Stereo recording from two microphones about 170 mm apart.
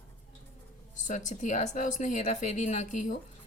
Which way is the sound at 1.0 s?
45° left (ahead or behind).